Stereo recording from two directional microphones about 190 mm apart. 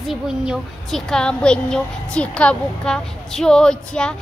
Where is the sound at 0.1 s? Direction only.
5° right (ahead or behind).